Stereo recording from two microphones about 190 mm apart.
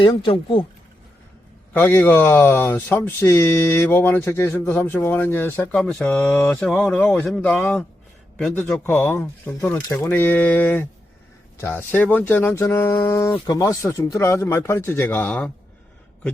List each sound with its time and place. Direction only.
0.0 s speech: 25° left (ahead or behind)
1.7 s speech: 10° left (ahead or behind)